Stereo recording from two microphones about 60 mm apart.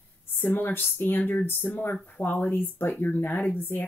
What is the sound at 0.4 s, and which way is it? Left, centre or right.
Speech, left.